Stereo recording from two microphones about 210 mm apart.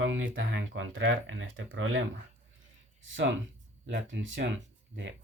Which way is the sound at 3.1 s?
60° right (ahead or behind).